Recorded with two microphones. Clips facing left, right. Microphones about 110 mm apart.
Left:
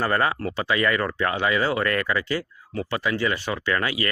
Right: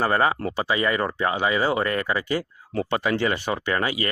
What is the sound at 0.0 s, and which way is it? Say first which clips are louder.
Speech: right 2 dB; 20° right (ahead or behind).